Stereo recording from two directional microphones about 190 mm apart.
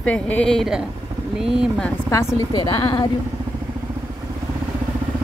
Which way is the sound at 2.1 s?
20° left (ahead or behind).